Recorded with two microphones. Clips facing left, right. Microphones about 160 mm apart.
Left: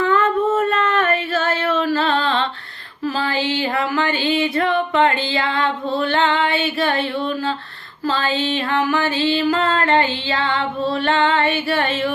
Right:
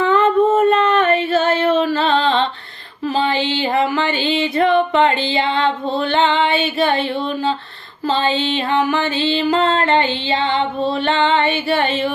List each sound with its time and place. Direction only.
0.1 s a sound: 20° right (ahead or behind)
3.2 s music: 25° right (ahead or behind)
8.0 s music: 25° right (ahead or behind)